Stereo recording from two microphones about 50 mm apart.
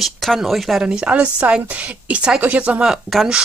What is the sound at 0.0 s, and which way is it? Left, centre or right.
Speech, centre.